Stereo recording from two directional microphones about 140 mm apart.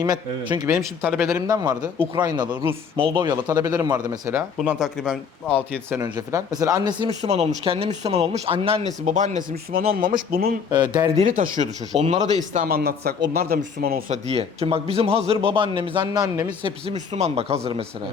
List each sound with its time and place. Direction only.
0.0 s speech: 30° right (ahead or behind)
0.7 s speech: 20° right (ahead or behind)
4.5 s speech: 5° right (ahead or behind)
5.7 s speech: 15° right (ahead or behind)
6.1 s speech: 25° right (ahead or behind)
7.1 s speech: 50° right (ahead or behind); by 10.5 s 80° right
10.7 s speech: 30° right (ahead or behind)
11.2 s speech: 65° right (ahead or behind)
11.9 s speech: 50° right (ahead or behind)
12.5 s speech: 90° right
14.1 s speech: 45° right (ahead or behind); by 16.6 s 25° right (ahead or behind)
16.6 s speech: 50° right (ahead or behind)